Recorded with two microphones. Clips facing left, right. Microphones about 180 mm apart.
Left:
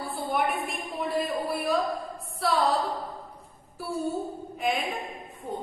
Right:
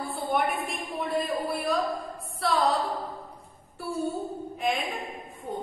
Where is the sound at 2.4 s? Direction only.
Centre (ahead or behind).